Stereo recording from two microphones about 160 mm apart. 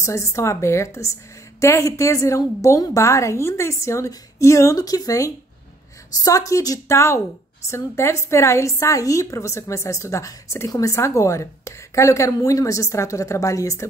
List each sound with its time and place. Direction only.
0.0 s a woman's voice: 20° left (ahead or behind)